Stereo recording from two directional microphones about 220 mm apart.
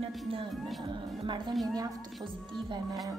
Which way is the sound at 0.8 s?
20° right (ahead or behind).